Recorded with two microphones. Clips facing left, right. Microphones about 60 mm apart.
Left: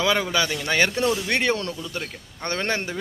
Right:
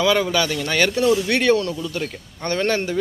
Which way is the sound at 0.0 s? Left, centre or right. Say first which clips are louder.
Right 4 dB; left.